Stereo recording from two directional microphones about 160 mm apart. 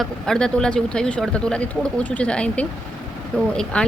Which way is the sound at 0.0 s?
5° left (ahead or behind).